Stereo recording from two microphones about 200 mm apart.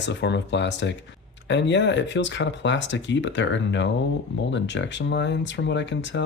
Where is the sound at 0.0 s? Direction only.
60° left (ahead or behind).